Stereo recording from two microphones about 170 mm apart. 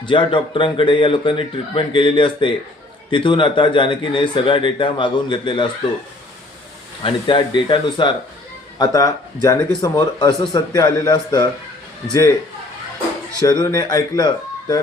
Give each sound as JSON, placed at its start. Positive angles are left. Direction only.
{"t": 0.0, "sound": "speech", "side_deg": 30}
{"t": 7.0, "sound": "speech", "side_deg": 30}
{"t": 13.4, "sound": "speech", "side_deg": 20}